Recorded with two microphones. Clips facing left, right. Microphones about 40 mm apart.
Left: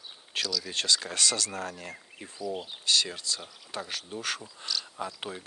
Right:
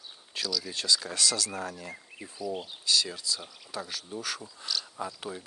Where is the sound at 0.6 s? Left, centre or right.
Left.